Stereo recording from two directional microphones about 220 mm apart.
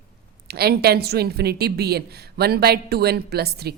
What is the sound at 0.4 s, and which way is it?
A woman's voice, 45° right (ahead or behind).